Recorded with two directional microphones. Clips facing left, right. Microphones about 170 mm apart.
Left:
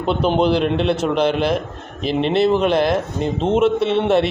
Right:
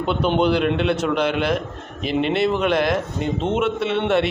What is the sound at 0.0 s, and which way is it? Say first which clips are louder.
A man's voice: left 2 dB; 35° left (ahead or behind).